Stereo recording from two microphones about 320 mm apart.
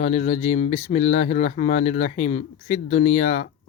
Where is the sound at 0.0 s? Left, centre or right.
Left.